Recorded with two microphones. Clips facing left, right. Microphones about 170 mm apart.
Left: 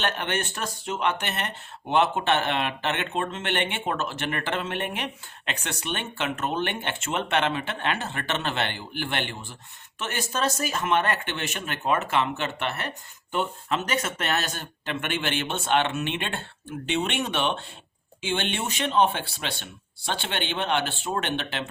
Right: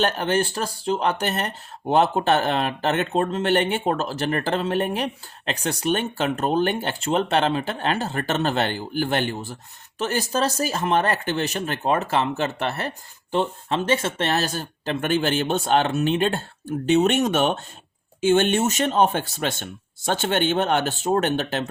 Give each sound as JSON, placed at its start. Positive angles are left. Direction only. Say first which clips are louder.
{"t": 0.0, "sound": "speech", "louder": "right 7 dB", "side_deg": -35}